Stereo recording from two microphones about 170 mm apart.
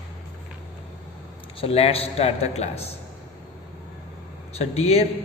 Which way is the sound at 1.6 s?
35° left (ahead or behind).